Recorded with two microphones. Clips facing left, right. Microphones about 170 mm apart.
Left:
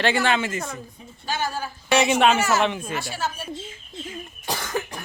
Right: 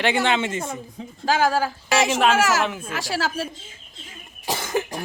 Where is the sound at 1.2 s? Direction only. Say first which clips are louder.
Right 8 dB; 90° right.